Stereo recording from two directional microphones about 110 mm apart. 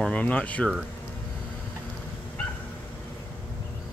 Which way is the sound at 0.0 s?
10° left (ahead or behind).